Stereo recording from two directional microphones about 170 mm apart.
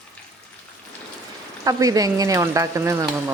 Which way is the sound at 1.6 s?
20° right (ahead or behind).